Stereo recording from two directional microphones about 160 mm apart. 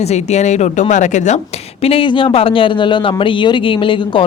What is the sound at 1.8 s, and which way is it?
Speech, 35° left (ahead or behind).